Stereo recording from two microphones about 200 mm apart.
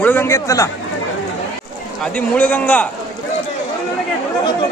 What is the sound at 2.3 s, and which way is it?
Speech, 5° left (ahead or behind).